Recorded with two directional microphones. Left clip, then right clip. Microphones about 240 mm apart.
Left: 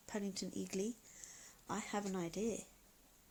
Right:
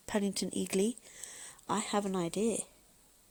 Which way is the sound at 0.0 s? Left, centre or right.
Right.